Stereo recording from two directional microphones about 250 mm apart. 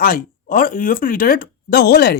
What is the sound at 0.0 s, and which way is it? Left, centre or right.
Speech, left.